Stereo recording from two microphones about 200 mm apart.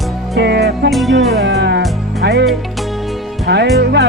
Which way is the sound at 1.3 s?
55° right (ahead or behind).